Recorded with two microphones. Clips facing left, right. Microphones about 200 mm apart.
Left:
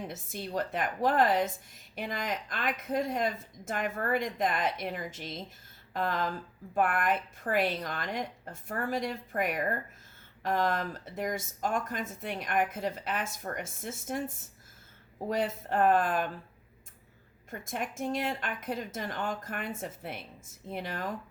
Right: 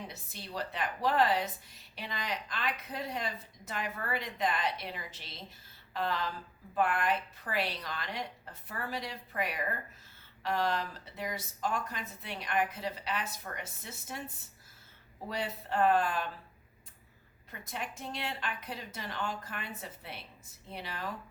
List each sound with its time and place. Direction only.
0.1 s a woman's voice: 50° left (ahead or behind)
15.3 s a woman's voice: 50° left (ahead or behind)
17.5 s a woman's voice: 50° left (ahead or behind)